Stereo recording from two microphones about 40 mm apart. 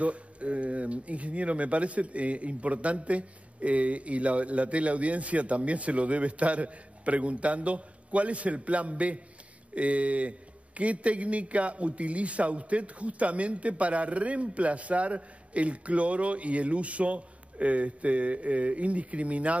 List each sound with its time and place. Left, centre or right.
0.0 s speech: right